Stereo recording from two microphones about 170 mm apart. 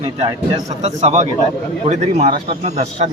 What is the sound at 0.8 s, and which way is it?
Speech, 40° right (ahead or behind).